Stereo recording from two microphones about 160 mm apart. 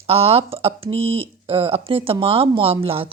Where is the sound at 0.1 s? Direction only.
35° right (ahead or behind).